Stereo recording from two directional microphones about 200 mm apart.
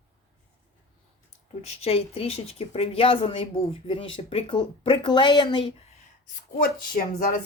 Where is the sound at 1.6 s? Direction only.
30° left (ahead or behind).